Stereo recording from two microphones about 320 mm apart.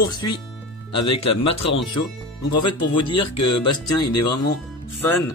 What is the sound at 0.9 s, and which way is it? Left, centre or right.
Speech, left.